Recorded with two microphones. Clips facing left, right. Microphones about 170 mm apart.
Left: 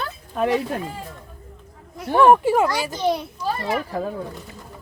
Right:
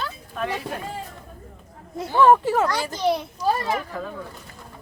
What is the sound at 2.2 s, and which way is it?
Speech, 15° left (ahead or behind).